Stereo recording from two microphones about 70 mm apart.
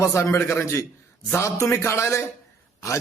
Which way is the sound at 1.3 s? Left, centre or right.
Left.